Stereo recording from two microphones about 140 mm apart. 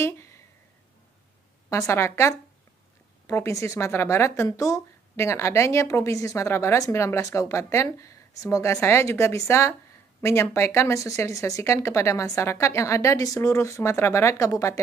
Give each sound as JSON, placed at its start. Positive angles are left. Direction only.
{"t": 1.7, "sound": "speech", "side_deg": 20}